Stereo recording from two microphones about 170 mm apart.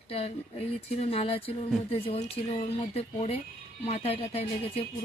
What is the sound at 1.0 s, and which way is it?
Speech, 35° left (ahead or behind).